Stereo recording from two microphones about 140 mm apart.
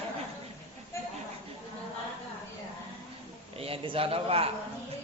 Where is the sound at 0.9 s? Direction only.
20° left (ahead or behind).